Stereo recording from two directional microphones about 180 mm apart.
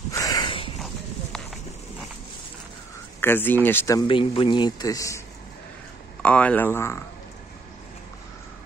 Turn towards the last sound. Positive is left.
turn(degrees=15)  # may be behind; listen again after turning